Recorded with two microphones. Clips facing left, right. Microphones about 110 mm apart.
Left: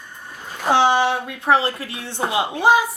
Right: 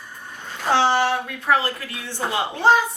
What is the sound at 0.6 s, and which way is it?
A woman's voice, 15° left (ahead or behind).